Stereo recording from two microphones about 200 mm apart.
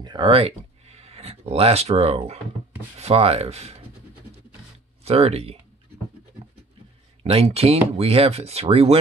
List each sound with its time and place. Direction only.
0.0 s speech: 25° right (ahead or behind)
5.0 s speech: 30° right (ahead or behind)
7.2 s speech: 30° right (ahead or behind)